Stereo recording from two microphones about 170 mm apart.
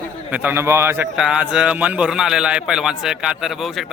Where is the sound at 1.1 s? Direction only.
5° right (ahead or behind).